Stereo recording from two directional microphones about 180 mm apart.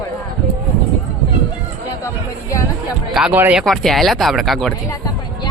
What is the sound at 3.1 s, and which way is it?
Speech, 5° right (ahead or behind).